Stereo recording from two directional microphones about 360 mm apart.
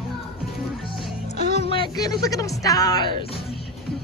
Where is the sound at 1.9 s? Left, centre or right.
Centre.